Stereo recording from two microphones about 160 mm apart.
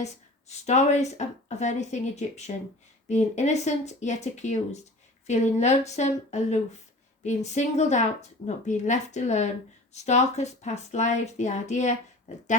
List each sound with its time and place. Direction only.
0.0 s a woman's voice: 45° left (ahead or behind)